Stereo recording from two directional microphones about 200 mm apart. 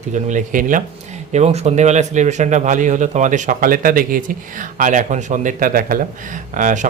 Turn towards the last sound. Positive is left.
turn(degrees=-40)  # may be behind; listen again after turning